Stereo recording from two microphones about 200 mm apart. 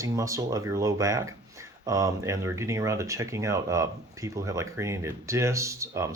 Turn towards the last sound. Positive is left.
turn(degrees=-15)  # may be behind; listen again after turning